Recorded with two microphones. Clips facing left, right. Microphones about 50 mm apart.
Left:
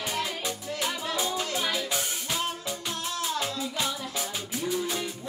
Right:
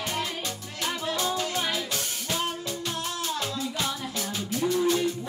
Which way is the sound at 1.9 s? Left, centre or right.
Centre.